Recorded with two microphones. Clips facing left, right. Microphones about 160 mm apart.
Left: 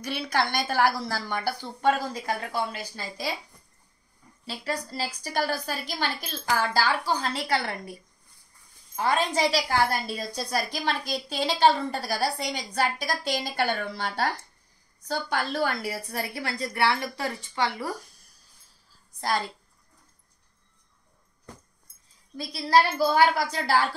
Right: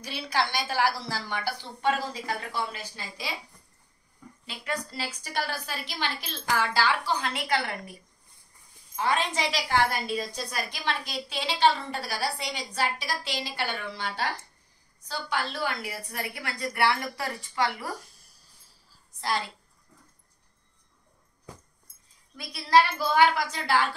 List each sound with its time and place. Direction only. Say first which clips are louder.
0.0 s a woman's voice: left 2 dB; 55° left (ahead or behind)
4.5 s a woman's voice: left 2 dB; 40° left (ahead or behind)
8.9 s a woman's voice: left 2 dB; 40° left (ahead or behind)
18.0 s a sound: even; centre (ahead or behind)
22.4 s a woman's voice: even; 30° left (ahead or behind)